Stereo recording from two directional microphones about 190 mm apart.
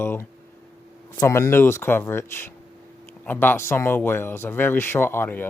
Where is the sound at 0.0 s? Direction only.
10° left (ahead or behind).